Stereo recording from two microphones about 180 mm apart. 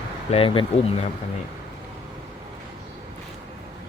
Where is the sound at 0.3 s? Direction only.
30° left (ahead or behind).